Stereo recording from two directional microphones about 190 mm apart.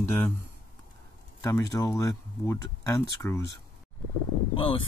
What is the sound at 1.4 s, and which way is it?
Speech, 15° left (ahead or behind).